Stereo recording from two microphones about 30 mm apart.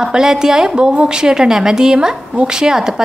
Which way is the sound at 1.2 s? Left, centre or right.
Right.